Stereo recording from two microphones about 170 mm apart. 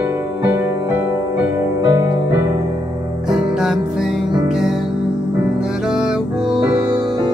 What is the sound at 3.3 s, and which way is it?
Music, 5° right (ahead or behind).